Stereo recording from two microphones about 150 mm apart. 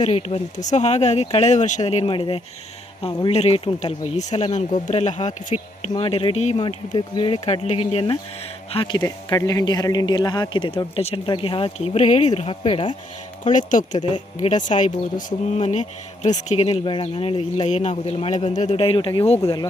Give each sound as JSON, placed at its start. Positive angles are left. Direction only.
{"t": 0.0, "sound": "a man's voice", "side_deg": 40}
{"t": 0.5, "sound": "speech", "side_deg": 55}
{"t": 2.1, "sound": "a man's voice", "side_deg": 35}
{"t": 3.2, "sound": "speech", "side_deg": 45}
{"t": 5.9, "sound": "a man's voice", "side_deg": 35}
{"t": 13.4, "sound": "speech", "side_deg": 55}